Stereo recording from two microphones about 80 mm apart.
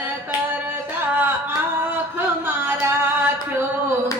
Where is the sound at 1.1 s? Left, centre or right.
Right.